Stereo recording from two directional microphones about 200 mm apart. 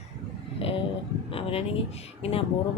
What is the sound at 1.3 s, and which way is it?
Speech, 30° left (ahead or behind).